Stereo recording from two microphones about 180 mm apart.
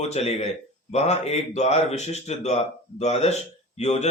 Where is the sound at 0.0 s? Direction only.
35° left (ahead or behind).